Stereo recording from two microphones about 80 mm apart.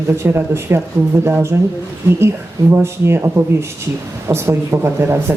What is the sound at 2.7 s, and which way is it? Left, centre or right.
Speech, right.